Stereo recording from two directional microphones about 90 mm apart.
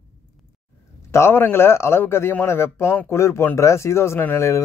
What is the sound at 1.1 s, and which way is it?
A man's voice, 30° left (ahead or behind).